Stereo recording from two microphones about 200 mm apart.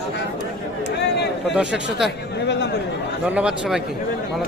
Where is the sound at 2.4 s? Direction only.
60° left (ahead or behind).